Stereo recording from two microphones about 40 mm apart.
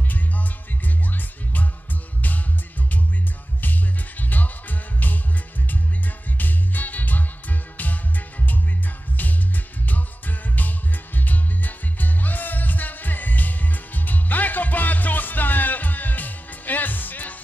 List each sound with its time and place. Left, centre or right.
1.1 s music: left
4.2 s music: left
6.3 s music: left
9.8 s music: left